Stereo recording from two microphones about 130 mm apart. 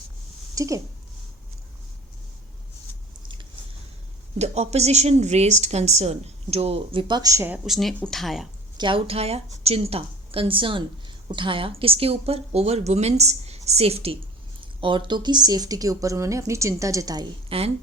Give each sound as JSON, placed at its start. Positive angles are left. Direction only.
{"t": 0.5, "sound": "a woman's voice", "side_deg": -25}
{"t": 4.4, "sound": "a woman's voice", "side_deg": -55}
{"t": 7.2, "sound": "speech", "side_deg": -25}
{"t": 7.6, "sound": "speech", "side_deg": 0}
{"t": 8.8, "sound": "a woman's voice", "side_deg": -40}
{"t": 14.8, "sound": "speech", "side_deg": -40}
{"t": 17.5, "sound": "a woman's voice", "side_deg": -45}